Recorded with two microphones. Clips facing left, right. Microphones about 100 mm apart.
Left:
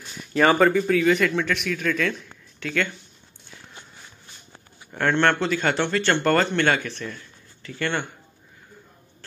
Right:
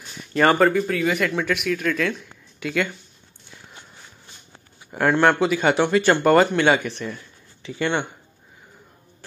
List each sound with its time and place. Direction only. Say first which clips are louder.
0.2 s speech: right 1 dB; centre (ahead or behind)
4.9 s speech: right 3 dB; 10° right (ahead or behind)